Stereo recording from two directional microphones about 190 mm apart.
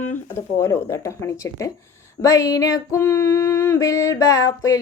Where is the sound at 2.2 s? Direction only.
15° left (ahead or behind).